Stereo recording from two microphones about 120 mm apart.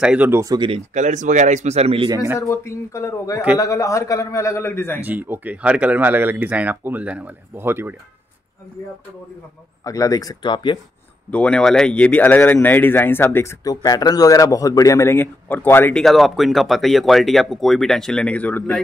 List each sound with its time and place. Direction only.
0.0 s speech: 10° right (ahead or behind)
0.3 s speech: 25° right (ahead or behind)
0.7 s speech: 80° right; by 2.0 s 55° right (ahead or behind)
2.4 s a man's voice: 25° left (ahead or behind)
5.0 s speech: 15° right (ahead or behind)
9.8 s speech: 30° left (ahead or behind)
11.2 s speech: 10° left (ahead or behind)
15.9 s speech: centre (ahead or behind)